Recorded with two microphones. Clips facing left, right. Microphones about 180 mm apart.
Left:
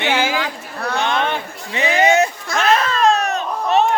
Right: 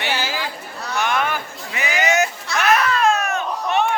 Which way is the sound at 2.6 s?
30° left (ahead or behind).